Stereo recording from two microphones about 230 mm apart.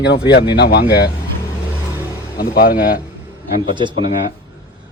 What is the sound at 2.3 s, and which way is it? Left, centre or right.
Speech, left.